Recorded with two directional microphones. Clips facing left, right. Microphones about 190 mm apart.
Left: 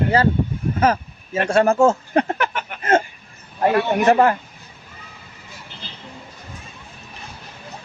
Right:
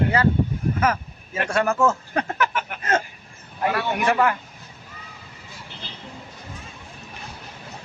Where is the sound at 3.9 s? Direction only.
40° left (ahead or behind).